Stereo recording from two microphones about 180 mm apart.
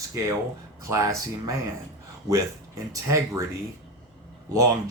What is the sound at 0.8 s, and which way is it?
Speech, 15° right (ahead or behind).